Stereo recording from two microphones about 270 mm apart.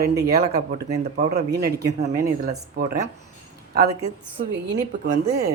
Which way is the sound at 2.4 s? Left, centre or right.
Right.